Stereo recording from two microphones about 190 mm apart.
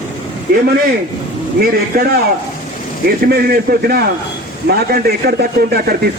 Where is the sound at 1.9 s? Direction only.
55° right (ahead or behind).